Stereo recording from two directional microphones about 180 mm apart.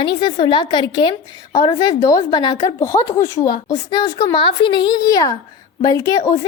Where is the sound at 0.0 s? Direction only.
25° left (ahead or behind).